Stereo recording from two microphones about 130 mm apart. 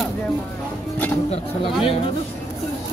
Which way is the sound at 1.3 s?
45° left (ahead or behind).